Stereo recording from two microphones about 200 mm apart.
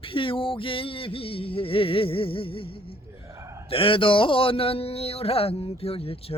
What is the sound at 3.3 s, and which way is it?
Gasp, 15° right (ahead or behind).